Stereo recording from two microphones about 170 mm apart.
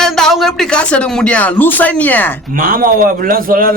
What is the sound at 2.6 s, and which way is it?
A man's voice, 55° right (ahead or behind).